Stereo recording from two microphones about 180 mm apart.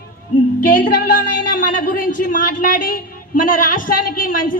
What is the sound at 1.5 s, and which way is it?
A woman's voice, 50° left (ahead or behind).